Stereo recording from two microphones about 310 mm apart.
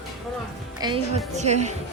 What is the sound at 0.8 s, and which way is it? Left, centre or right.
Speech, centre.